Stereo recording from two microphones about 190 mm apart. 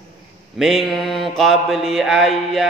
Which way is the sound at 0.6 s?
Centre (ahead or behind).